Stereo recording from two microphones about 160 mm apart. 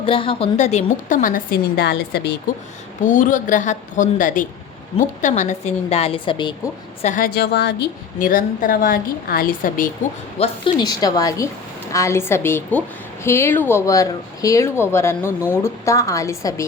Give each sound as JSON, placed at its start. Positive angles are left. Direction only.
{"t": 0.0, "sound": "a woman's voice", "side_deg": 35}
{"t": 3.0, "sound": "a woman's voice", "side_deg": 55}
{"t": 7.0, "sound": "a woman's voice", "side_deg": 50}
{"t": 7.3, "sound": "a woman's voice", "side_deg": 85}
{"t": 10.3, "sound": "a woman's voice", "side_deg": 35}